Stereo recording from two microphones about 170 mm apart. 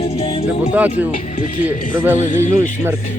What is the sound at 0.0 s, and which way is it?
Music, 35° left (ahead or behind).